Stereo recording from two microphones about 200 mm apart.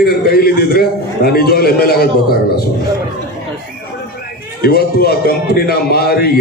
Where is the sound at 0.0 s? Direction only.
50° left (ahead or behind).